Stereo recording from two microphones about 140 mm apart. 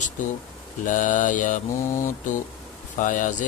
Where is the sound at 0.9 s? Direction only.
70° left (ahead or behind).